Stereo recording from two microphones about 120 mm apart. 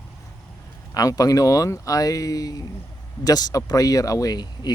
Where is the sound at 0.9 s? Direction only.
30° left (ahead or behind).